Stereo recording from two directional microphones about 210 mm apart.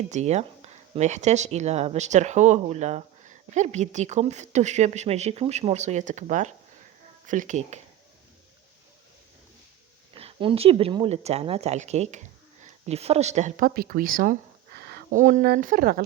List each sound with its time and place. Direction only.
0.1 s speech: 30° right (ahead or behind)
10.2 s speech: 25° right (ahead or behind); by 16.0 s 45° right (ahead or behind)